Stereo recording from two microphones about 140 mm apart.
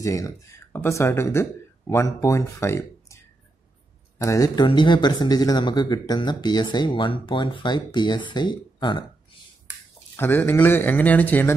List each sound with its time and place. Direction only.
0.0 s speech: 25° left (ahead or behind)
4.2 s speech: 25° left (ahead or behind)
10.1 s speech: 15° left (ahead or behind)